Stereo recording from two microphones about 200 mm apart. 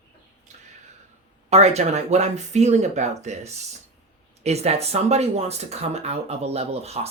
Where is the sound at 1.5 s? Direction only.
30° right (ahead or behind).